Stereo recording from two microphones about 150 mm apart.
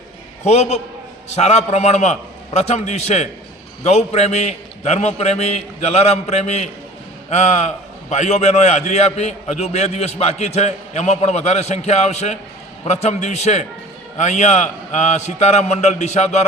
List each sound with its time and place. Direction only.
0.4 s a man's voice: 45° left (ahead or behind)